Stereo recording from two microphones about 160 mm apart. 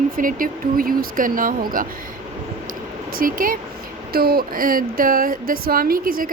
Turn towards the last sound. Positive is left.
turn(degrees=-65)  # may be behind; listen again after turning